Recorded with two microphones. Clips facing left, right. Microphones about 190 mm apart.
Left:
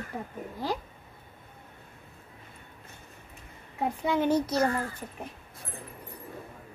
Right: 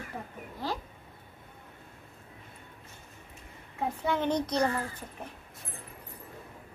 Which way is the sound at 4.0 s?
10° left (ahead or behind).